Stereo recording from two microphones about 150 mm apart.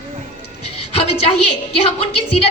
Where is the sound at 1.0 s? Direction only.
40° left (ahead or behind).